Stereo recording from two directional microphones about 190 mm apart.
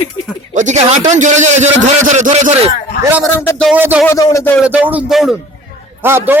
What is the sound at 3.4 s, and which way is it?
Speech, 10° left (ahead or behind).